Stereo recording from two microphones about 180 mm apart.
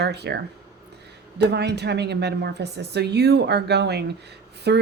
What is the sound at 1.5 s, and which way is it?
A woman's voice, 70° right (ahead or behind).